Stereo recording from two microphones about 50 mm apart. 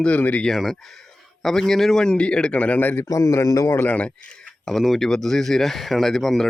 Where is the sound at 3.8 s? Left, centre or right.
Left.